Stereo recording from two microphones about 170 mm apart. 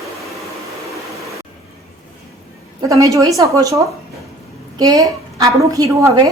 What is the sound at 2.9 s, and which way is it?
A woman's voice, 20° right (ahead or behind).